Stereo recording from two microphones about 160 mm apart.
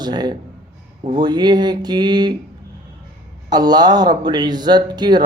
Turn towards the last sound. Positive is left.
turn(degrees=-25)  # may be behind; listen again after turning